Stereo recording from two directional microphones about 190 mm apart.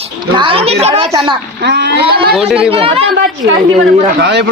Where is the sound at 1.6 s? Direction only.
60° right (ahead or behind).